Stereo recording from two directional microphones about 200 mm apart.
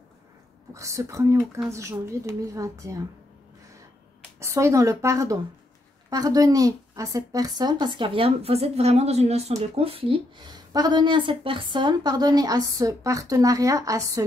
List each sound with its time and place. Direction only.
0.7 s speech: 15° right (ahead or behind)
4.4 s speech: 15° right (ahead or behind)